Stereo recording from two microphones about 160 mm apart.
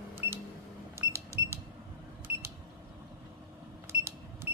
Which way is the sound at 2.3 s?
10° right (ahead or behind).